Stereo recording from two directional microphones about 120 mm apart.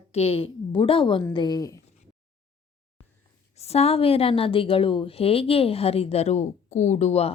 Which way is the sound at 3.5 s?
60° left (ahead or behind).